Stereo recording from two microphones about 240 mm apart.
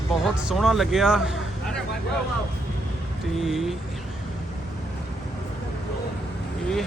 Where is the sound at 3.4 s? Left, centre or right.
Centre.